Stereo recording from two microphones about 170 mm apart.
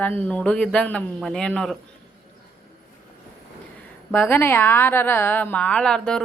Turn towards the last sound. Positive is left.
turn(degrees=5)  # may be behind; listen again after turning